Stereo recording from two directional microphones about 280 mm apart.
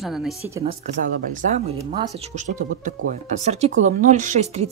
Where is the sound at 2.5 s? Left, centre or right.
Right.